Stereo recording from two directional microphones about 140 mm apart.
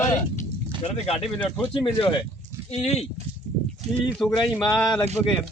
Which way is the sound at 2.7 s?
50° left (ahead or behind).